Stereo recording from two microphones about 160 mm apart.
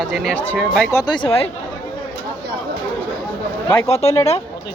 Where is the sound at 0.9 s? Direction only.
20° left (ahead or behind).